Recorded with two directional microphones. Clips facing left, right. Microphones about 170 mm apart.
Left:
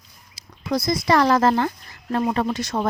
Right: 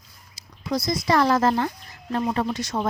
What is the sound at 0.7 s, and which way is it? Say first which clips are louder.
Speech: left 3 dB; 60° left (ahead or behind).